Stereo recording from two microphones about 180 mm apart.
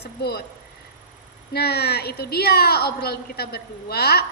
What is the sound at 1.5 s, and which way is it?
A woman's voice, 65° left (ahead or behind).